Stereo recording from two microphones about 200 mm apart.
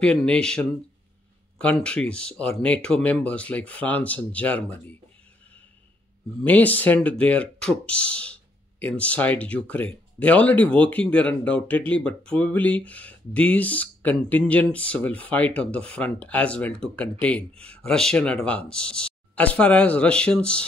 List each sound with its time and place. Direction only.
0.0 s speech: 5° left (ahead or behind)
6.4 s speech: 10° left (ahead or behind)